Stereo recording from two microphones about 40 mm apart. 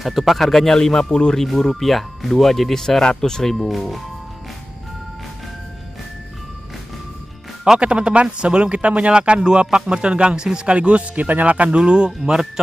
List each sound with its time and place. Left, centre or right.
0.0 s speech: centre
7.8 s speech: right
10.7 s speech: right
11.8 s speech: right